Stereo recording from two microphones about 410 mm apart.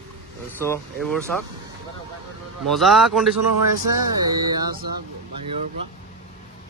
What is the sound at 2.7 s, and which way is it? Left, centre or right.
Speech, centre.